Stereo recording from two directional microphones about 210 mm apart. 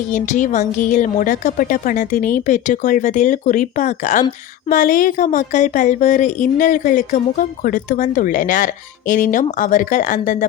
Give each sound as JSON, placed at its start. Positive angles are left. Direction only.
{"t": 0.1, "sound": "a woman's voice", "side_deg": 35}